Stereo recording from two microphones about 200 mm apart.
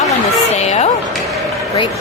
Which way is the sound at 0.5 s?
35° left (ahead or behind).